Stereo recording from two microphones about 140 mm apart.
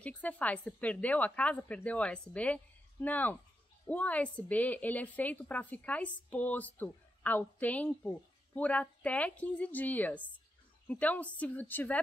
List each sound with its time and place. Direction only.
0.0 s a woman's voice: 10° left (ahead or behind)